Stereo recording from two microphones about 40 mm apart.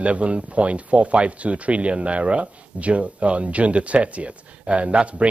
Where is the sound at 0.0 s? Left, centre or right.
Right.